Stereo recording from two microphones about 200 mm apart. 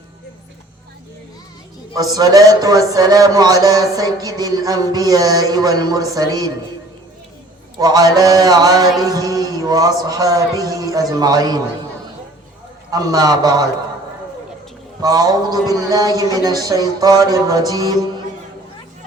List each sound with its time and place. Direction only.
1.9 s a man's voice: 20° right (ahead or behind)
7.8 s a man's voice: 20° right (ahead or behind)
12.9 s a man's voice: 20° right (ahead or behind)
15.0 s a man's voice: 20° right (ahead or behind)